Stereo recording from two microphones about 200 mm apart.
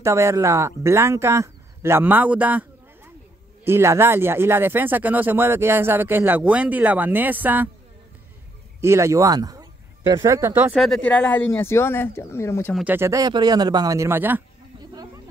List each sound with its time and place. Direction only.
0.0 s speech: 15° right (ahead or behind)
8.8 s speech: 15° right (ahead or behind)
11.1 s speech: 5° left (ahead or behind)
12.7 s speech: 10° right (ahead or behind)